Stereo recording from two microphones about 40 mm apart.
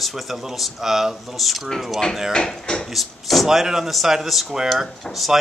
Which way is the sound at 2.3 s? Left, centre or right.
Left.